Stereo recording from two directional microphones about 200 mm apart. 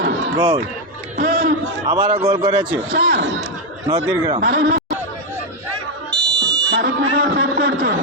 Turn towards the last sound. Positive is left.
turn(degrees=-50)  # may be behind; listen again after turning